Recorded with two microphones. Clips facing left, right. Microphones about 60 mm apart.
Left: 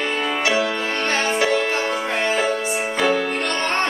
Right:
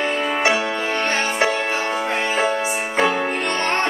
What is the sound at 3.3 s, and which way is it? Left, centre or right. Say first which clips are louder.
Music: right 1 dB; centre.